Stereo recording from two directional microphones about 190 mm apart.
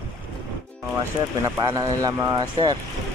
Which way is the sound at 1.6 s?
20° right (ahead or behind).